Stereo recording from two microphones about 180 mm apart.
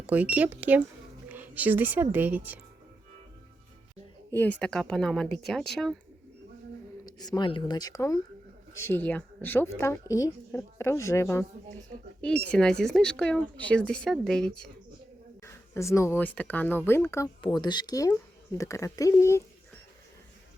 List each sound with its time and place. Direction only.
0.1 s a woman's voice: 10° right (ahead or behind)
4.4 s speech: 5° left (ahead or behind)
7.0 s speech: 20° left (ahead or behind)
12.5 s speech: 5° left (ahead or behind)
15.4 s speech: 15° left (ahead or behind)
17.4 s speech: 25° left (ahead or behind)